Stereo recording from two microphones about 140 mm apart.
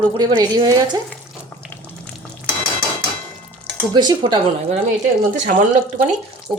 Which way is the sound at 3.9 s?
30° right (ahead or behind).